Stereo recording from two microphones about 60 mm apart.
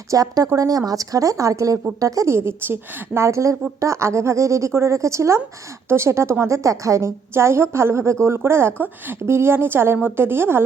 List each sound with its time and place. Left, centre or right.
0.1 s speech: right
0.5 s a woman's voice: right
2.3 s a woman's voice: right
3.2 s a woman's voice: right